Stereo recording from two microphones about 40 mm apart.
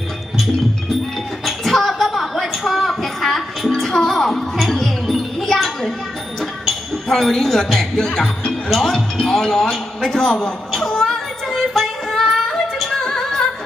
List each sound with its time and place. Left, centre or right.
1.5 s a sound: centre
3.8 s music: centre
6.4 s a man's voice: centre
10.8 s child singing: centre
13.1 s music: centre